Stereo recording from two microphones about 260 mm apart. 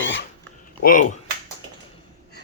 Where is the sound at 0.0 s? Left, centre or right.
Left.